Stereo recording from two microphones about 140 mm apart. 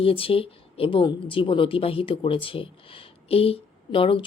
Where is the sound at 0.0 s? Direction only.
40° left (ahead or behind).